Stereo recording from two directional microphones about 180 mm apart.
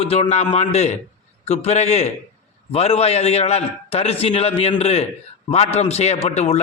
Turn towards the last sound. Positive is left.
turn(degrees=35)  # may be behind; listen again after turning